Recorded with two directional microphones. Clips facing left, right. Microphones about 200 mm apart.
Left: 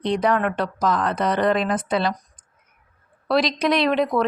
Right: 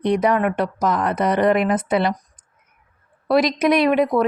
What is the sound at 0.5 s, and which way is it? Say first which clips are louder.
Speech: right 2 dB; 20° right (ahead or behind).